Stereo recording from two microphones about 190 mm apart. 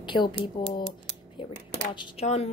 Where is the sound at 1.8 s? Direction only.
30° left (ahead or behind).